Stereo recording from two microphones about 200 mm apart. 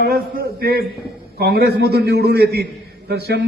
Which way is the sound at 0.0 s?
50° right (ahead or behind).